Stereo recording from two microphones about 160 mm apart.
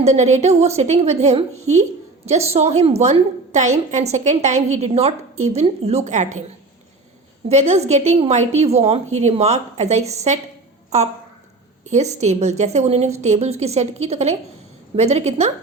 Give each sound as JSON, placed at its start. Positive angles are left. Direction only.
{"t": 0.0, "sound": "a woman's voice", "side_deg": -45}
{"t": 7.4, "sound": "a woman's voice", "side_deg": -40}